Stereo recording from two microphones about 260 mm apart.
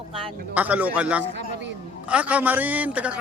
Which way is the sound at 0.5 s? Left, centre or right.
Centre.